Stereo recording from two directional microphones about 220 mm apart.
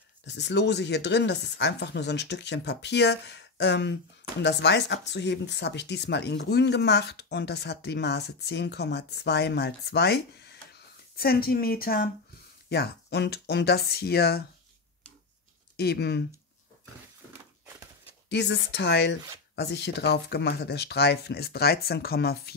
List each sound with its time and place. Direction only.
0.2 s speech: 50° left (ahead or behind)
15.7 s speech: 45° left (ahead or behind)
18.3 s speech: 50° left (ahead or behind)